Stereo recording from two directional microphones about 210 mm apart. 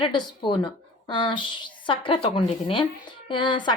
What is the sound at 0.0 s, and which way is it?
A woman's voice, 20° left (ahead or behind).